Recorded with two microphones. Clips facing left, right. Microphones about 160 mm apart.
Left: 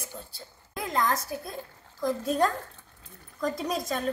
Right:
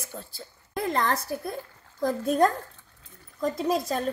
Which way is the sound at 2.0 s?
60° right (ahead or behind).